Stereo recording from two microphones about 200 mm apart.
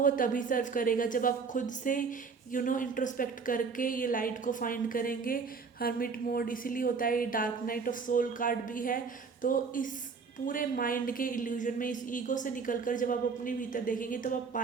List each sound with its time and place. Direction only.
0.0 s speech: 40° left (ahead or behind)